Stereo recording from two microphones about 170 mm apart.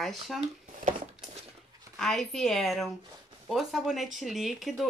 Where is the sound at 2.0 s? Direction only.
Centre (ahead or behind).